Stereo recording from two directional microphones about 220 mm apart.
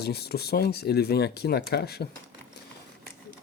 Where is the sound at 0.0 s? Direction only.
45° left (ahead or behind).